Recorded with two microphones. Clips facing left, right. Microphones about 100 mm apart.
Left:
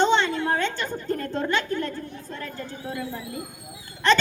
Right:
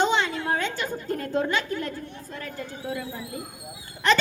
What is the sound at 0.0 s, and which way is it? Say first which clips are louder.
A woman's voice: left 3 dB; 5° right (ahead or behind).